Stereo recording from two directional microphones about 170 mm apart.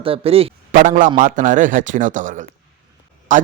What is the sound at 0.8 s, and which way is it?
A man's voice, 50° right (ahead or behind).